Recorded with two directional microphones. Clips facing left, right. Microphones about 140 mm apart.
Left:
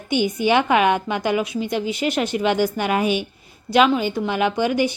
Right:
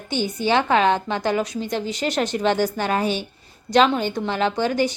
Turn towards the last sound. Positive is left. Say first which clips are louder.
# left 1 dB
turn(degrees=15)  # may be behind; listen again after turning